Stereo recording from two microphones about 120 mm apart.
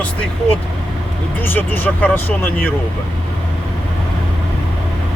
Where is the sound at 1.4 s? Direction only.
15° left (ahead or behind).